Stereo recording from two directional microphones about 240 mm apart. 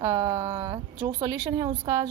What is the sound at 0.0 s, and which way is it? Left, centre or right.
A woman's voice, centre.